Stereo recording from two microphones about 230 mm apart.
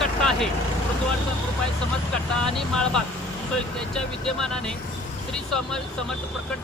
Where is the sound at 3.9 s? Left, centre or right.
Centre.